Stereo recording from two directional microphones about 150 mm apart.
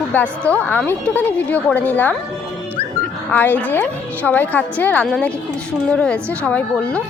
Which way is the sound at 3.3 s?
10° left (ahead or behind).